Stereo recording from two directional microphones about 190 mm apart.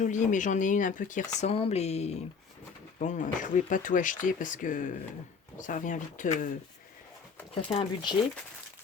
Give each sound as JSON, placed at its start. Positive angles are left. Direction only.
{"t": 0.0, "sound": "speech", "side_deg": 40}
{"t": 7.5, "sound": "speech", "side_deg": 30}